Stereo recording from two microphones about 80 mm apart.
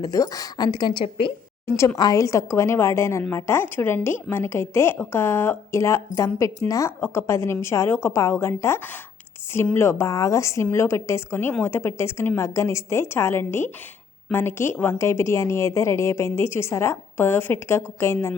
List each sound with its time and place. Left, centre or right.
0.0 s a woman's voice: left
1.6 s a woman's voice: left
2.0 s a woman's voice: left